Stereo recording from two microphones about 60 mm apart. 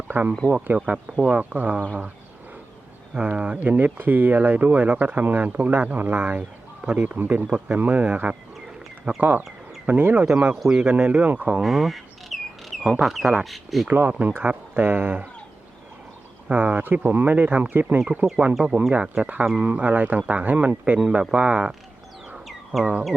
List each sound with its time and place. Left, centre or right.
0.1 s speech: right
3.2 s speech: right
10.5 s speech: centre
10.8 s speech: centre
11.6 s a sound: centre
12.9 s speech: centre
13.8 s speech: right
16.5 s speech: right
18.2 s speech: right
18.6 s speech: centre
22.4 s bird: centre